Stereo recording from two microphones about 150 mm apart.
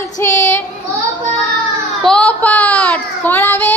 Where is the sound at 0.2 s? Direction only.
20° left (ahead or behind).